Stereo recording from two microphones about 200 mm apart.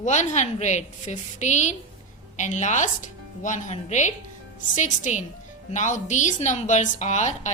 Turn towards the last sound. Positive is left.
turn(degrees=35)  # may be behind; listen again after turning